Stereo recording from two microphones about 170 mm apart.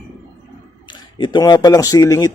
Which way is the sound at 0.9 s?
25° left (ahead or behind).